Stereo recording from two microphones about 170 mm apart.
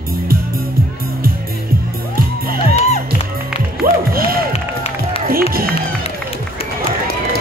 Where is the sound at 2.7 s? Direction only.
40° left (ahead or behind).